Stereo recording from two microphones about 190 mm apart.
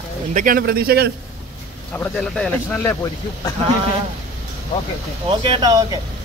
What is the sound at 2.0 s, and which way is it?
Speech, 5° left (ahead or behind).